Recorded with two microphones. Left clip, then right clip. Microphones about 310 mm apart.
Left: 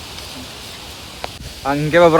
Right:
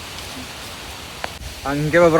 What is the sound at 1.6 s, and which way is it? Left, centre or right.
Speech, centre.